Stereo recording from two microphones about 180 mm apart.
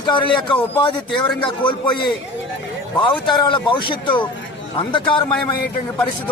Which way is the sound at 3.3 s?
25° left (ahead or behind).